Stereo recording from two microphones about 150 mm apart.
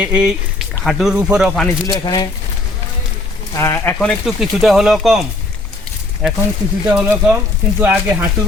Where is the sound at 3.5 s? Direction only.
20° left (ahead or behind).